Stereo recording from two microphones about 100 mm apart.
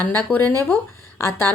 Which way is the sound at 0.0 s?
20° left (ahead or behind).